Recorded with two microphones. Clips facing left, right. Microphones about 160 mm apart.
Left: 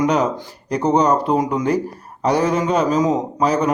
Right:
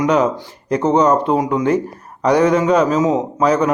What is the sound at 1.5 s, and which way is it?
Speech, 35° left (ahead or behind).